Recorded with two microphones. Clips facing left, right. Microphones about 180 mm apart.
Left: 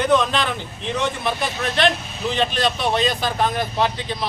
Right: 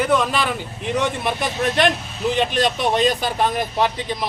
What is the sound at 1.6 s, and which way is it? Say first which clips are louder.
Speech: right 1 dB; 45° right (ahead or behind).